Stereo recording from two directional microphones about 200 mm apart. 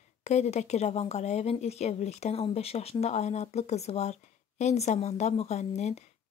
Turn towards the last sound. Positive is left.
turn(degrees=35)  # may be behind; listen again after turning